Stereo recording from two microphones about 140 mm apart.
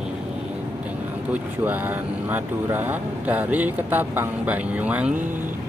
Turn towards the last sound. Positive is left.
turn(degrees=-15)  # may be behind; listen again after turning